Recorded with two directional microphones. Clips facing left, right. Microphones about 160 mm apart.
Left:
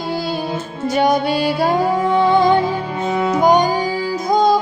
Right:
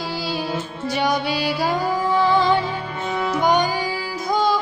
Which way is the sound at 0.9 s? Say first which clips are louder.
Left 6 dB; 50° left (ahead or behind).